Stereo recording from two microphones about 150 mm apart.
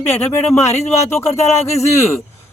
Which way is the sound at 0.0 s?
15° left (ahead or behind).